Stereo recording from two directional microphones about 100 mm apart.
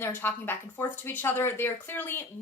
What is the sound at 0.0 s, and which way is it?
Speech, 20° left (ahead or behind).